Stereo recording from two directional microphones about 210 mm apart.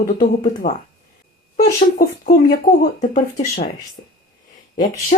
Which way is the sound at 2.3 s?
45° left (ahead or behind).